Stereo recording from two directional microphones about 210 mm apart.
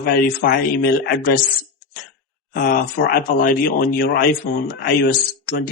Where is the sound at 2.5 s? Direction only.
45° left (ahead or behind).